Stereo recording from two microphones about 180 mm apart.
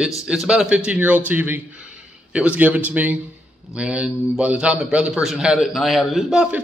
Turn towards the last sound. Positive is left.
turn(degrees=-5)  # may be behind; listen again after turning